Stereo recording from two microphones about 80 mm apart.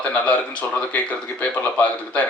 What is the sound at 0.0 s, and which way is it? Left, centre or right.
Speech, centre.